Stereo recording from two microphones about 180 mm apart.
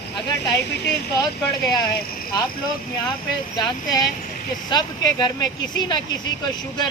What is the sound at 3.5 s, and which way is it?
Speech, 20° left (ahead or behind).